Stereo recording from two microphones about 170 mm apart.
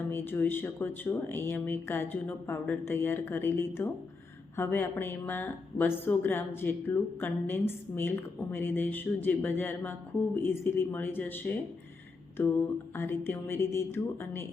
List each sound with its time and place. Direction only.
0.1 s speech: 10° left (ahead or behind)
13.0 s speech: 15° left (ahead or behind)